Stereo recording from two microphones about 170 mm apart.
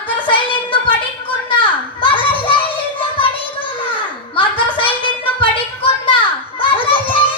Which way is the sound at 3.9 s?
30° left (ahead or behind).